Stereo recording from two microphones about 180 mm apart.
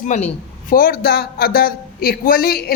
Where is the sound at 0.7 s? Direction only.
55° left (ahead or behind).